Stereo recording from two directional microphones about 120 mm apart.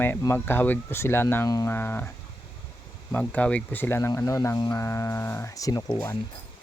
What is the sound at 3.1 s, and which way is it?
Speech, 15° left (ahead or behind).